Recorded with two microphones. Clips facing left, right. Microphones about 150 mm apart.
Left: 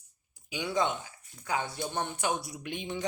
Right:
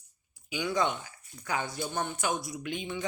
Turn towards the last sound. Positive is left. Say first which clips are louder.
# right 1 dB
turn(degrees=30)  # may be behind; listen again after turning